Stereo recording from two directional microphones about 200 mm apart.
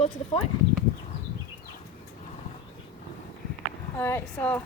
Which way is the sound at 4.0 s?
10° left (ahead or behind).